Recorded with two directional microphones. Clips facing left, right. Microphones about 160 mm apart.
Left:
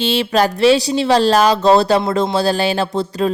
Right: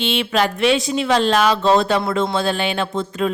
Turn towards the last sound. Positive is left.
turn(degrees=35)  # may be behind; listen again after turning